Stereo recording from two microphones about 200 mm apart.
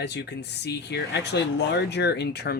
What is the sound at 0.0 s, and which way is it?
Speech, 60° left (ahead or behind).